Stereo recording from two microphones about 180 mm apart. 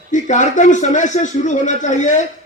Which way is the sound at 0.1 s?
45° left (ahead or behind).